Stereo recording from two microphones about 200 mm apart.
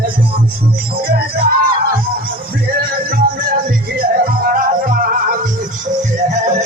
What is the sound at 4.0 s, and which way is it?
Music, 45° right (ahead or behind).